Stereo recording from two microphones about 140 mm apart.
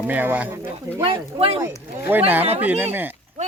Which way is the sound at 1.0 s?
40° right (ahead or behind).